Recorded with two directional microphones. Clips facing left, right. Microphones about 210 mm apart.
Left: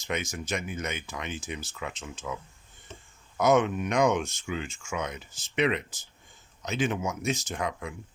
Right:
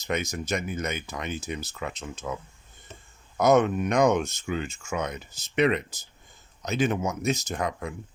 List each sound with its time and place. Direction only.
0.1 s speech: 40° right (ahead or behind)
3.3 s speech: 40° right (ahead or behind)